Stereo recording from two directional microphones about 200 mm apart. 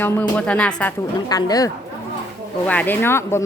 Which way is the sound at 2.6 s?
10° left (ahead or behind).